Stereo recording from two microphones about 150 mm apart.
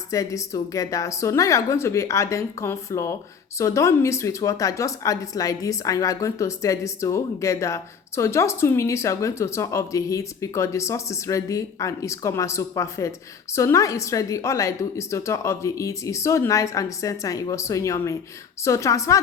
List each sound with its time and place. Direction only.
0.1 s a woman's voice: 20° left (ahead or behind)